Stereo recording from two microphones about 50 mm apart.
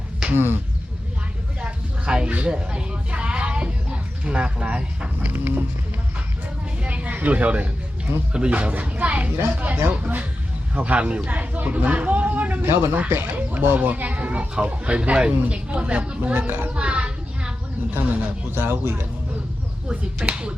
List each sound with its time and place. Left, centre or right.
0.3 s speech: right
1.6 s a sound: right
5.2 s speech: right
6.8 s a sound: right
8.3 s speech: right
12.6 s speech: right
13.7 s a child's voice: right
16.6 s a sound: right
17.9 s speech: right
20.2 s speech: centre